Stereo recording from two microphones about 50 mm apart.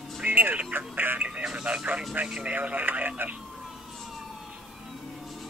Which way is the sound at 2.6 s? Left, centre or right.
Right.